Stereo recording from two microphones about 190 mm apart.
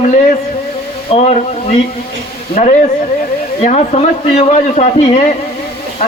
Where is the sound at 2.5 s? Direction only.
40° left (ahead or behind).